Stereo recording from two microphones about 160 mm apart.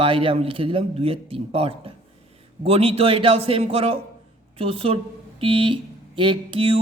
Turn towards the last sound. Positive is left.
turn(degrees=-35)  # may be behind; listen again after turning